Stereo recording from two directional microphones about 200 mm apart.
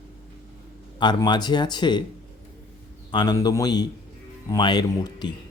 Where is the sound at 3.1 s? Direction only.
20° left (ahead or behind).